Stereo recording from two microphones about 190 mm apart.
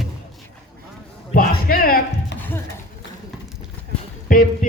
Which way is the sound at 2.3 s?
10° left (ahead or behind).